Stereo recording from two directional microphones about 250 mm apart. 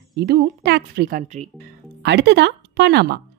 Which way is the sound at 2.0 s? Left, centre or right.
Right.